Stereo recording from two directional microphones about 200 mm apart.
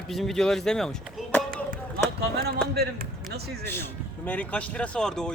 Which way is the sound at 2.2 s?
50° right (ahead or behind).